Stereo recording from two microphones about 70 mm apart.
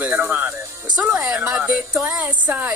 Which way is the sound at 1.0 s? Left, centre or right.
Centre.